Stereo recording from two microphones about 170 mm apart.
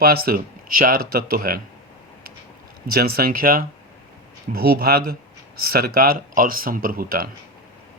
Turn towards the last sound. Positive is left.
turn(degrees=-60)  # may be behind; listen again after turning